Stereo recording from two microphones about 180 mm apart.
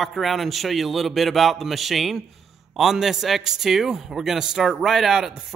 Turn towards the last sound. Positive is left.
turn(degrees=-5)  # may be behind; listen again after turning